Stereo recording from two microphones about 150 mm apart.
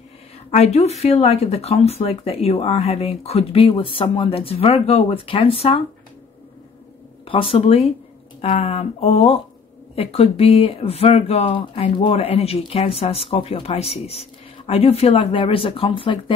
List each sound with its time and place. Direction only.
0.5 s speech: 45° left (ahead or behind)
7.2 s speech: 40° left (ahead or behind)